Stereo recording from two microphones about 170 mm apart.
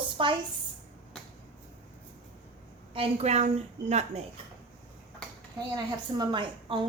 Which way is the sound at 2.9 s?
35° right (ahead or behind).